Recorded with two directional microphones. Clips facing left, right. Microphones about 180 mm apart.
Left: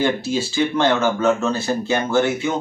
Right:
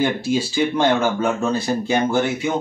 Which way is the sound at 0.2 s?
15° right (ahead or behind).